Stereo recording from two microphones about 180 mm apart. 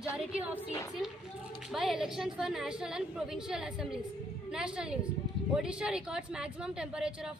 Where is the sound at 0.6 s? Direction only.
15° left (ahead or behind).